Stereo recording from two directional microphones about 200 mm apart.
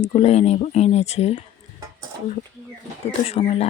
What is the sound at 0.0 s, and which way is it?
Speech, 30° left (ahead or behind).